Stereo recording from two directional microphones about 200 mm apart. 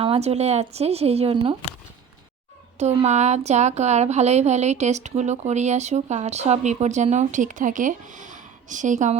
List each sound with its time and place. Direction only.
0.0 s speech: 30° right (ahead or behind)
2.7 s speech: 35° right (ahead or behind)